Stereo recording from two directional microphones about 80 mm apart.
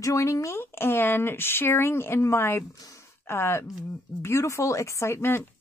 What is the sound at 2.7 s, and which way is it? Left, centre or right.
Speech, left.